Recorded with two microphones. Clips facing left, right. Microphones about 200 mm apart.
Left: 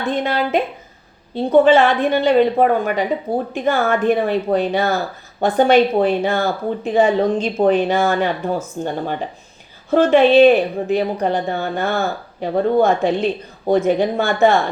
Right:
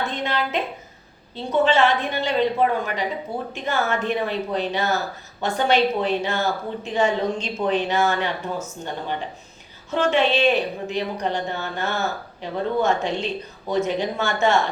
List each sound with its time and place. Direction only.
0.0 s a woman's voice: 50° left (ahead or behind)